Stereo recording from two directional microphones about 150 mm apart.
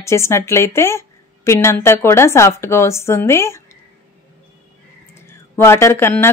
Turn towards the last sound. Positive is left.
turn(degrees=15)  # may be behind; listen again after turning